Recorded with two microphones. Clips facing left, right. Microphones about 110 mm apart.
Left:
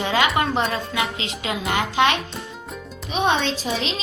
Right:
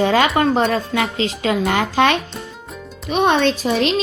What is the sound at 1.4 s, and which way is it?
Speech, 55° right (ahead or behind).